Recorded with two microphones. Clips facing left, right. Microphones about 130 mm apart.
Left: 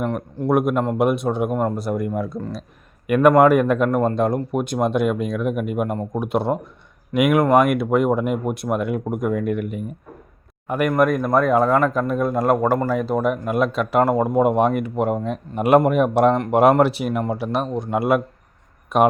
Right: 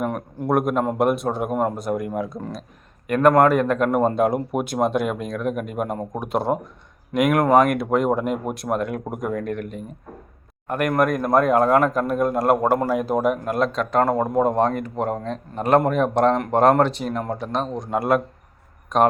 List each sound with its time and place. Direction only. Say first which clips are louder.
0.0 s a man's voice: left 2 dB; 5° right (ahead or behind)
3.8 s a man's voice: even; 5° right (ahead or behind)